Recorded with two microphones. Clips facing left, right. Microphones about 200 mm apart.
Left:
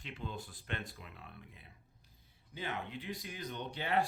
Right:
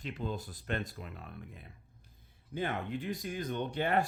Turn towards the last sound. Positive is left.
turn(degrees=-50)  # may be behind; listen again after turning